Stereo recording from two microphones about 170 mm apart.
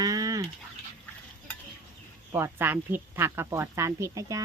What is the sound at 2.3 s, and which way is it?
Speech, 15° right (ahead or behind).